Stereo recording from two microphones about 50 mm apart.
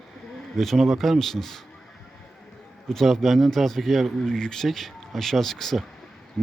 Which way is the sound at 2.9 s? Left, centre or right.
Centre.